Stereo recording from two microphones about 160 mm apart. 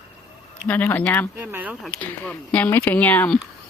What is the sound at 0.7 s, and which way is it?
Speech, 10° left (ahead or behind).